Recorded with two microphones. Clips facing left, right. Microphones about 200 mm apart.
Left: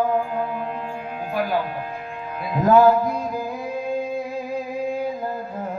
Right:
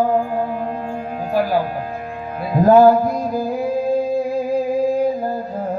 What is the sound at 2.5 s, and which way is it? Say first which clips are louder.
Music: right 4 dB; 35° right (ahead or behind).